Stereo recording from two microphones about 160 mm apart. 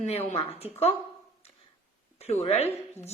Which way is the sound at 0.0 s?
45° left (ahead or behind).